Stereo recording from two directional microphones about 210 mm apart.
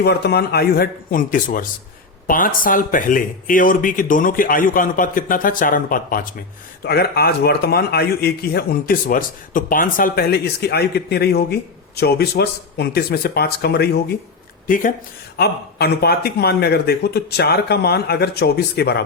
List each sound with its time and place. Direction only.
0.0 s a man's voice: 50° left (ahead or behind)